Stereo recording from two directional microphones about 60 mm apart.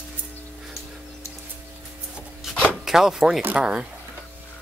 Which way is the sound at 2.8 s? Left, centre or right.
Centre.